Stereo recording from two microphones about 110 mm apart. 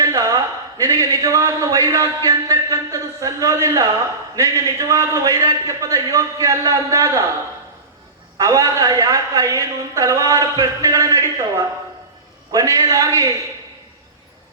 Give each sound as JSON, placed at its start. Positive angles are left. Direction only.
{"t": 0.0, "sound": "a man's voice", "side_deg": -30}
{"t": 8.4, "sound": "a woman's voice", "side_deg": -30}